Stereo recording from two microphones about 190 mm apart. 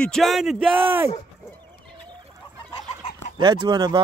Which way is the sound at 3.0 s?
30° left (ahead or behind).